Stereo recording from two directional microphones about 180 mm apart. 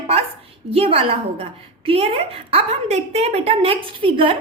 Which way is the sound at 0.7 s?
35° right (ahead or behind).